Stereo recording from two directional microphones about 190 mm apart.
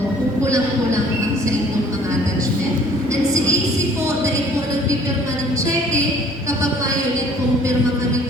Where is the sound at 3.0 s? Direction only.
15° right (ahead or behind).